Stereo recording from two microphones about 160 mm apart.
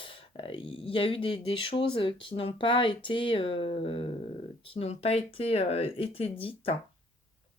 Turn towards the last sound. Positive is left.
turn(degrees=35)  # may be behind; listen again after turning